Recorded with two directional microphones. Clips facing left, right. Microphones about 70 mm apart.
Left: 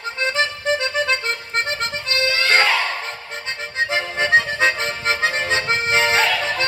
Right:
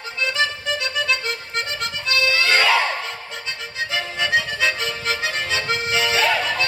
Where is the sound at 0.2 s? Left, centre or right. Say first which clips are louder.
Left 1 dB; left.